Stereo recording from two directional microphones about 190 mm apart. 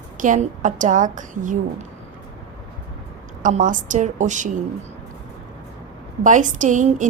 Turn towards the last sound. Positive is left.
turn(degrees=-40)  # may be behind; listen again after turning